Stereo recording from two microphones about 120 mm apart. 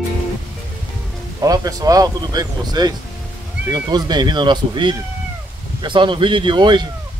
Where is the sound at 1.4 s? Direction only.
30° right (ahead or behind).